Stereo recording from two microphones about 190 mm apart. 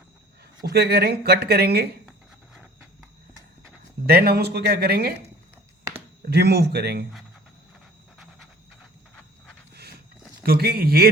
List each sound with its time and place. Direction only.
0.6 s speech: 55° right (ahead or behind)
4.0 s speech: 55° right (ahead or behind)
6.2 s speech: 60° right (ahead or behind)
10.4 s speech: 55° right (ahead or behind)